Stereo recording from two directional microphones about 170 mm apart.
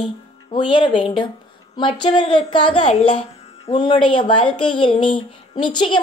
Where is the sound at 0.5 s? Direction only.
30° left (ahead or behind).